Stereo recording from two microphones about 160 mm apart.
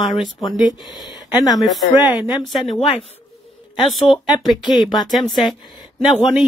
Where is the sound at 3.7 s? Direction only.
Centre (ahead or behind).